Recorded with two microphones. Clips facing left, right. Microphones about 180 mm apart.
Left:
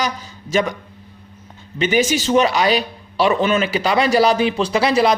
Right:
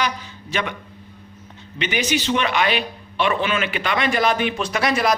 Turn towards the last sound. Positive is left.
turn(degrees=30)  # may be behind; listen again after turning